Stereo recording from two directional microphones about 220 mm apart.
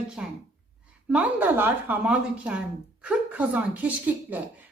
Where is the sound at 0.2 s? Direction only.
5° right (ahead or behind).